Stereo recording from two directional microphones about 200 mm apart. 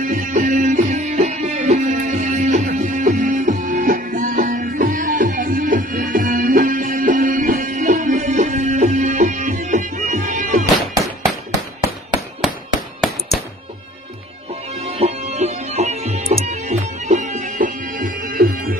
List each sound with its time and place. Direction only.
0.0 s music: 40° right (ahead or behind)
14.5 s music: 30° right (ahead or behind)